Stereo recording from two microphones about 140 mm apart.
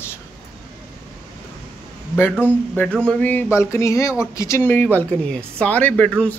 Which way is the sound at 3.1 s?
10° left (ahead or behind).